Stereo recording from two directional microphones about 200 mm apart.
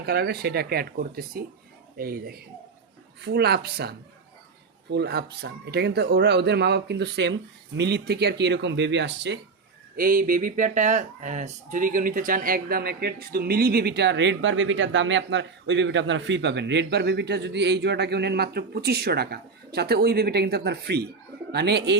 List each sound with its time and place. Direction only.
0.0 s speech: 50° right (ahead or behind)
9.9 s speech: 45° right (ahead or behind)